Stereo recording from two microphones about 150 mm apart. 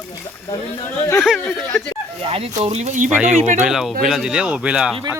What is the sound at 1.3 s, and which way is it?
Speech, 15° left (ahead or behind).